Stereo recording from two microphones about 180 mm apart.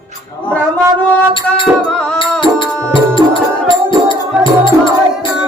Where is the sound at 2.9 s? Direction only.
30° left (ahead or behind).